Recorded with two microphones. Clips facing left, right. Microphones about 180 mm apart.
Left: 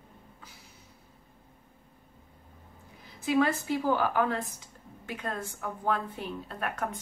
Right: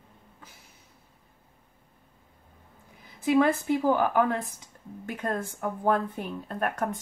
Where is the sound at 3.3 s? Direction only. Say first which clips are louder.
Right 4 dB; 50° right (ahead or behind).